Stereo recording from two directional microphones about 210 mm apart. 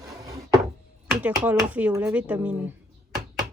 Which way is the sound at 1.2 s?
5° right (ahead or behind).